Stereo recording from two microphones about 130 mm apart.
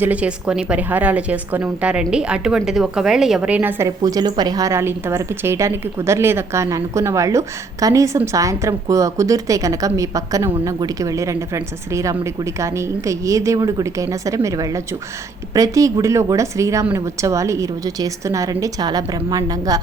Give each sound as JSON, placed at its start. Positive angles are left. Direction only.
{"t": 0.0, "sound": "a woman's voice", "side_deg": -10}
{"t": 3.8, "sound": "a woman's voice", "side_deg": -30}